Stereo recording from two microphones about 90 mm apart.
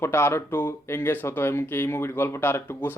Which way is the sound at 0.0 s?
25° left (ahead or behind).